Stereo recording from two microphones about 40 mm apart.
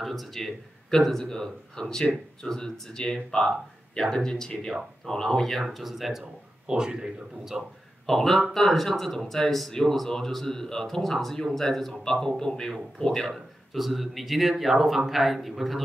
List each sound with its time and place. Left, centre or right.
0.0 s a man's voice: centre
6.7 s speech: right
7.5 s a man's voice: centre
8.1 s a man's voice: centre
13.7 s speech: centre